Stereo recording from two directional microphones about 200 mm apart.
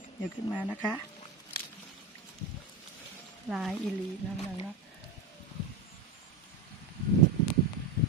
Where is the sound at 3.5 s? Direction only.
Centre (ahead or behind).